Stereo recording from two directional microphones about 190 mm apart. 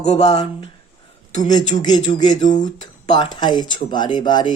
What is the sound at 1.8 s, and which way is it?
Speech, 20° left (ahead or behind).